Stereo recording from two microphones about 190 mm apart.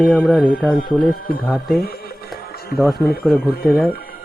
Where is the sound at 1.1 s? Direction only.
50° left (ahead or behind).